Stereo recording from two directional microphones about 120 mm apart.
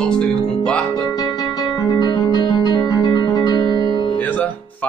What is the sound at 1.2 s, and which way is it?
Music, 35° left (ahead or behind).